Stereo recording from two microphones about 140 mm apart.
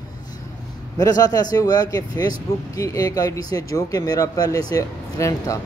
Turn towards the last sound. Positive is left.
turn(degrees=25)  # may be behind; listen again after turning